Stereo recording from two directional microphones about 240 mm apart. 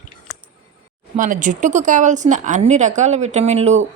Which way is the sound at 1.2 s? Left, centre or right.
Right.